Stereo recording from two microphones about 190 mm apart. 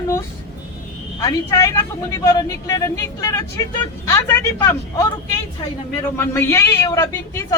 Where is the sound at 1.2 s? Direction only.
20° left (ahead or behind).